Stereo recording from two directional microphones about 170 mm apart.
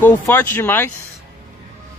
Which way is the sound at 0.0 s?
10° left (ahead or behind).